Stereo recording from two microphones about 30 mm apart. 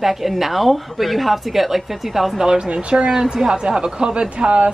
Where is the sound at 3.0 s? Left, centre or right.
Centre.